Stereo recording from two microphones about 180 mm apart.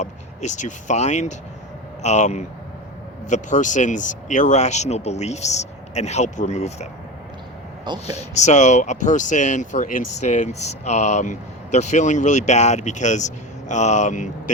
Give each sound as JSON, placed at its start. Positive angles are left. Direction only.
{"t": 0.0, "sound": "speech", "side_deg": 40}
{"t": 8.0, "sound": "speech", "side_deg": 40}